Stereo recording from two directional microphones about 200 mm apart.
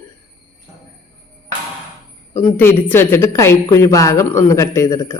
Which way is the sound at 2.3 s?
10° left (ahead or behind).